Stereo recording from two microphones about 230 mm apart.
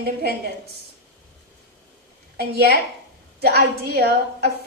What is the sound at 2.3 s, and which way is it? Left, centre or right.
A woman's voice, right.